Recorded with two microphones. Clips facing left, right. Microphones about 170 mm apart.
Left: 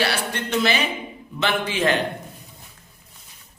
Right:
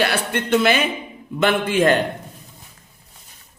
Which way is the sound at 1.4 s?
50° right (ahead or behind).